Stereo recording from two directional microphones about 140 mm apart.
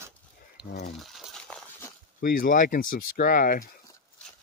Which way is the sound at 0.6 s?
10° right (ahead or behind).